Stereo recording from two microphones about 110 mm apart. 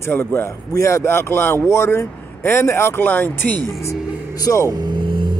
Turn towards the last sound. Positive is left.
turn(degrees=-45)  # may be behind; listen again after turning